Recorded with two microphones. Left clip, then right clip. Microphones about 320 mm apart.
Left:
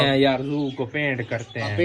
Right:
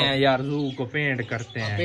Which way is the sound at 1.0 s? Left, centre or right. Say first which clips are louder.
Left 1 dB; centre.